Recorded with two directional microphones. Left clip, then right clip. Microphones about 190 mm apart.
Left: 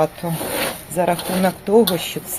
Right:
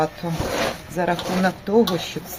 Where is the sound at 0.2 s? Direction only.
25° left (ahead or behind).